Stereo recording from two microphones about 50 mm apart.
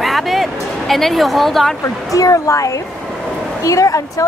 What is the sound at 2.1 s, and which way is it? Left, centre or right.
Speech, left.